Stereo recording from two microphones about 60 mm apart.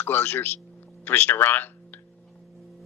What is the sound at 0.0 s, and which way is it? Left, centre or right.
Speech, left.